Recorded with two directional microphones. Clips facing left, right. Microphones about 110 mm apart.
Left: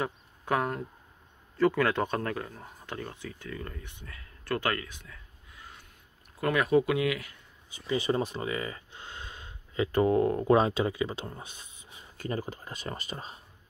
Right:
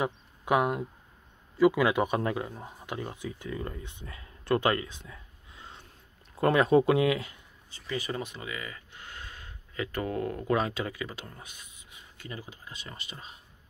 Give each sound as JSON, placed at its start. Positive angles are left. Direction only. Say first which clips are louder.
{"t": 0.0, "sound": "speech", "louder": "right 2 dB", "side_deg": -15}
{"t": 7.7, "sound": "speech", "louder": "left 6 dB", "side_deg": 20}